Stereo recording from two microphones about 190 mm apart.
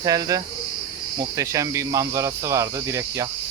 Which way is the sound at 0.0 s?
20° right (ahead or behind).